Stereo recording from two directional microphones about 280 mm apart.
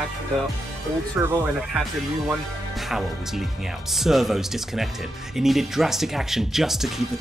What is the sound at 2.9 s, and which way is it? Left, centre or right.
Speech, centre.